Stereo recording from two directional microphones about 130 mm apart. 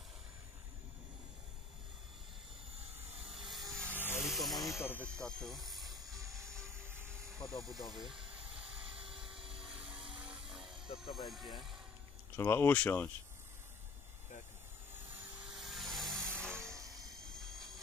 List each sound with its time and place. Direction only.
3.3 s helicopter: centre (ahead or behind)
3.7 s helicopter: 10° left (ahead or behind)
4.2 s music: centre (ahead or behind)
4.5 s speech: 25° left (ahead or behind); by 5.8 s centre (ahead or behind)
5.8 s helicopter: 30° right (ahead or behind)
6.5 s helicopter: 20° right (ahead or behind)
7.3 s speech: 25° left (ahead or behind)
7.7 s speech: centre (ahead or behind)
9.1 s helicopter: 5° right (ahead or behind)
11.2 s speech: centre (ahead or behind)
12.4 s speech: 15° left (ahead or behind)
15.5 s vehicle: centre (ahead or behind)
16.7 s a sound: 30° right (ahead or behind)